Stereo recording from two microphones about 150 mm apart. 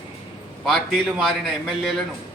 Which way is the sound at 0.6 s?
Centre (ahead or behind).